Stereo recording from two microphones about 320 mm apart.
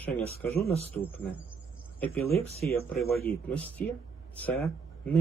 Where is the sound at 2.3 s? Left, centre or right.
Left.